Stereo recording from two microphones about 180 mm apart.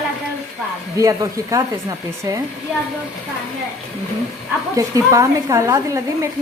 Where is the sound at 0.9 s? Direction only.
20° right (ahead or behind).